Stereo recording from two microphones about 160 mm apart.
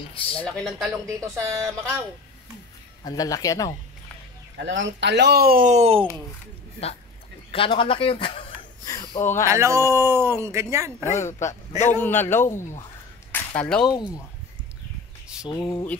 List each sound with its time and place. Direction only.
0.1 s speech: 35° left (ahead or behind)
0.5 s speech: centre (ahead or behind)
1.0 s speech: 20° right (ahead or behind)
3.0 s speech: 25° left (ahead or behind)
4.6 s speech: 90° right; by 5.7 s 70° right (ahead or behind)
5.7 s speech: 40° right (ahead or behind)
7.5 s speech: 35° left (ahead or behind)
8.8 s a sound: 25° left (ahead or behind)
9.2 s a man's voice: 15° left (ahead or behind)
9.5 s speech: 15° right (ahead or behind)
11.1 s speech: 50° left (ahead or behind)
12.0 s a man's voice: 15° left (ahead or behind)
13.8 s speech: 25° left (ahead or behind)
15.4 s speech: 30° left (ahead or behind)